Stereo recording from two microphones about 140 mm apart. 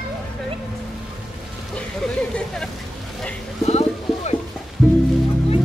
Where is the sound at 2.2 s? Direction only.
5° left (ahead or behind).